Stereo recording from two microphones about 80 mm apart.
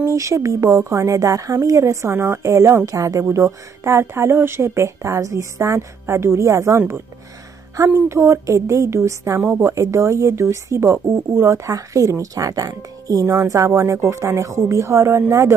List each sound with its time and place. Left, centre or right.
0.0 s a woman's voice: right